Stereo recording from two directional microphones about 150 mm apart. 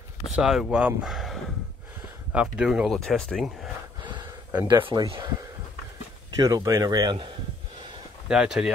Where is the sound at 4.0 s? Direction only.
30° right (ahead or behind).